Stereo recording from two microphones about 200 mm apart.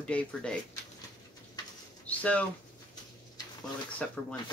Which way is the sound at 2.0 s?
5° left (ahead or behind).